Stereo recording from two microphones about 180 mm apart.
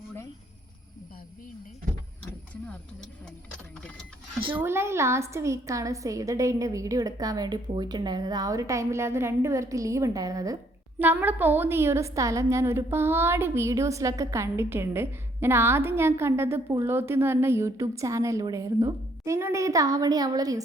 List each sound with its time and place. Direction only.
4.6 s a woman's voice: 15° right (ahead or behind)